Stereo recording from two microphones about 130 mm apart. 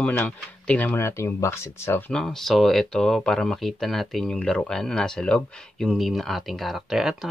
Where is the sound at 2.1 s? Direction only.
5° left (ahead or behind).